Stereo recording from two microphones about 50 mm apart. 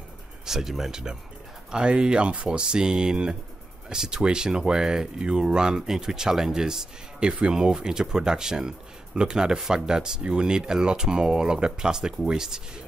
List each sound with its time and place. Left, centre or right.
0.5 s speech: centre